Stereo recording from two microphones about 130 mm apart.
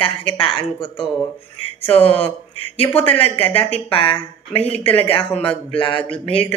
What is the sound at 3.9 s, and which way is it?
A woman's voice, 45° left (ahead or behind).